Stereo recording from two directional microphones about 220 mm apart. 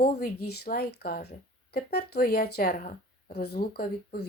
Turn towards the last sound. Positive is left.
turn(degrees=45)  # may be behind; listen again after turning